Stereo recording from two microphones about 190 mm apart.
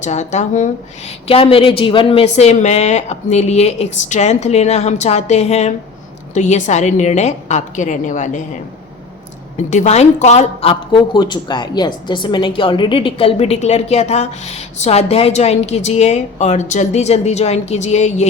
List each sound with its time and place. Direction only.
0.0 s a woman's voice: 40° left (ahead or behind)
9.6 s a woman's voice: 40° left (ahead or behind)